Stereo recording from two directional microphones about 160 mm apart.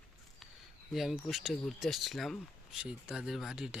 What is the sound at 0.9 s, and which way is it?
Speech, centre (ahead or behind).